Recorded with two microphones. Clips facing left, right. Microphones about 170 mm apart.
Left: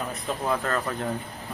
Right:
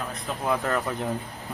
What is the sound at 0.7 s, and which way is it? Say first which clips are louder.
Speech: right 1 dB; 15° right (ahead or behind).